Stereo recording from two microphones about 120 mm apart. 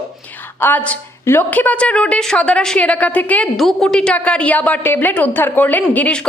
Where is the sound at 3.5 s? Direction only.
Centre (ahead or behind).